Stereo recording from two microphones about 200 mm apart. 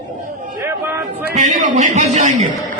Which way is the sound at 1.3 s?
40° right (ahead or behind).